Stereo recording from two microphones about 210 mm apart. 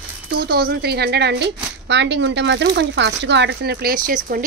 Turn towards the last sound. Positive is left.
turn(degrees=-40)  # may be behind; listen again after turning